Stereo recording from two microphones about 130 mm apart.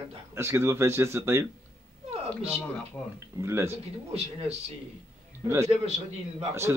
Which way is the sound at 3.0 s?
15° left (ahead or behind).